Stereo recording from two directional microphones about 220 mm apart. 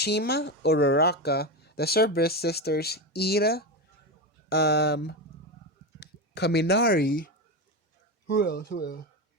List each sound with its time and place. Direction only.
0.0 s speech: 50° left (ahead or behind)
8.3 s speech: 50° left (ahead or behind)